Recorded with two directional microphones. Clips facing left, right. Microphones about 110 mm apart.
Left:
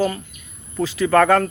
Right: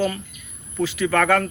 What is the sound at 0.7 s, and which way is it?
Speech, 30° left (ahead or behind).